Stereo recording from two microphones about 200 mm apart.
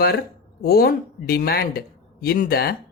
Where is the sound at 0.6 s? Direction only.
50° left (ahead or behind).